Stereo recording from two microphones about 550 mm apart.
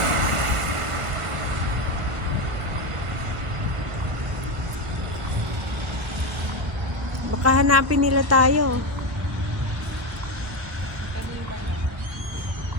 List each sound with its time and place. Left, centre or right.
0.0 s vehicle: right
7.4 s a woman's voice: right